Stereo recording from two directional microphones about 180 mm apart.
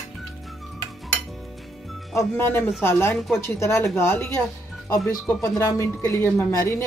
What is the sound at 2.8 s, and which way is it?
Speech, 15° left (ahead or behind).